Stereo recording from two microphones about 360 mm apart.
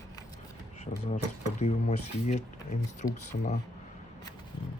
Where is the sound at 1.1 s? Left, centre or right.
Centre.